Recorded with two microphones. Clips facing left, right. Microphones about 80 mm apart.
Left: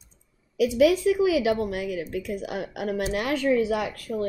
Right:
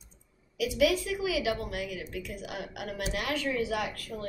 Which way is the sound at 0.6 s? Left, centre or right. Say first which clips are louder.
Left 7 dB; left.